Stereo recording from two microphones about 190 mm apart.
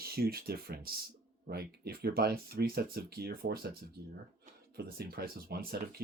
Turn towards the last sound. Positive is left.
turn(degrees=-50)  # may be behind; listen again after turning